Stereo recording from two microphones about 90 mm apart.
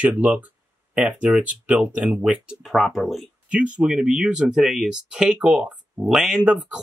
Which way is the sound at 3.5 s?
15° right (ahead or behind).